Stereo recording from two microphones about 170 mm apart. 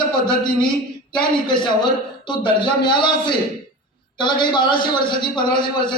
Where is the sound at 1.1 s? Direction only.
25° left (ahead or behind).